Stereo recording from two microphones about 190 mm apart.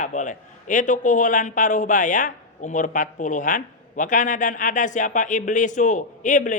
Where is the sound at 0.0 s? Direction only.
40° left (ahead or behind).